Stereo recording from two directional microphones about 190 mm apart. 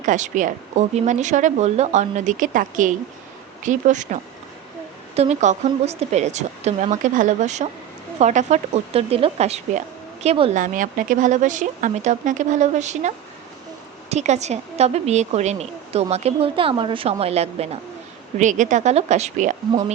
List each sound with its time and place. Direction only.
0.0 s a woman's voice: 40° right (ahead or behind)
10.6 s a woman's voice: 45° right (ahead or behind)